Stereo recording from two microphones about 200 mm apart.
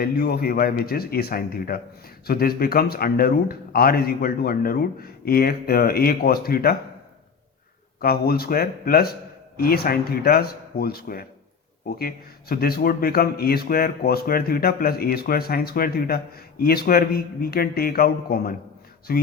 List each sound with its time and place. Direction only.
0.0 s a man's voice: 50° left (ahead or behind)
8.0 s a man's voice: 50° left (ahead or behind)